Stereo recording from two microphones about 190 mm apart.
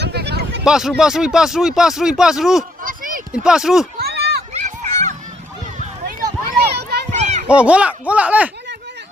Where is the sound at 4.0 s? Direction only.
60° right (ahead or behind).